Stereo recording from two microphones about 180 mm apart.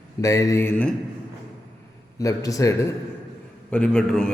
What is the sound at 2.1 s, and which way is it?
Speech, 20° left (ahead or behind).